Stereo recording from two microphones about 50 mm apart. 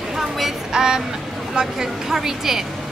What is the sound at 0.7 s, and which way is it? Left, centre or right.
Speech, centre.